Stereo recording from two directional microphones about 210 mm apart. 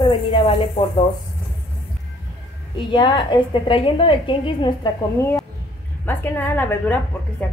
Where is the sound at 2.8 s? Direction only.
20° left (ahead or behind).